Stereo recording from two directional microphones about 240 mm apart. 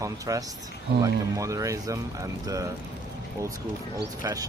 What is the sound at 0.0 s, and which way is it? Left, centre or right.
Speech, centre.